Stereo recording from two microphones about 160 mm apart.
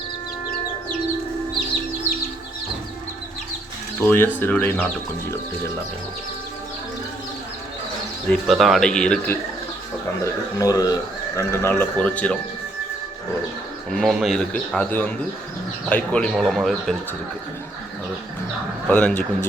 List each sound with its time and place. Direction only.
4.0 s speech: 15° left (ahead or behind)
8.3 s a man's voice: centre (ahead or behind)
10.6 s speech: 20° left (ahead or behind)
13.9 s a man's voice: centre (ahead or behind)
18.9 s speech: 10° left (ahead or behind)